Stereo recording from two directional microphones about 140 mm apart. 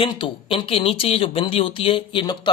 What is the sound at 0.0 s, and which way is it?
Speech, 40° left (ahead or behind).